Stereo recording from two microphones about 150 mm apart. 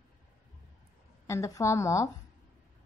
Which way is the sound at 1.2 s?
20° left (ahead or behind).